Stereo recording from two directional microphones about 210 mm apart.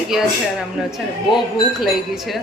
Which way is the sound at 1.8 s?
Centre (ahead or behind).